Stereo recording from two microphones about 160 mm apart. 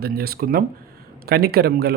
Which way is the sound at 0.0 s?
70° right (ahead or behind).